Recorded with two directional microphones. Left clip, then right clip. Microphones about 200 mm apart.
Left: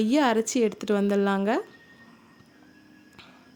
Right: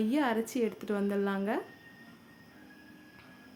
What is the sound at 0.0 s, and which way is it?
Speech, 45° left (ahead or behind).